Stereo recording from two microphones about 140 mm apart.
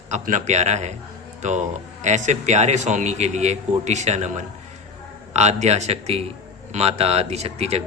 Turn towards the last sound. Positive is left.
turn(degrees=-50)  # may be behind; listen again after turning